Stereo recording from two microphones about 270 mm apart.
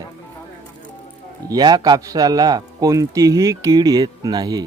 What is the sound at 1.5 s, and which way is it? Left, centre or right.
A man's voice, centre.